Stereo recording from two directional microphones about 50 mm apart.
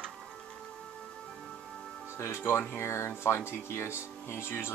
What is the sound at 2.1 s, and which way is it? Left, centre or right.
Music, left.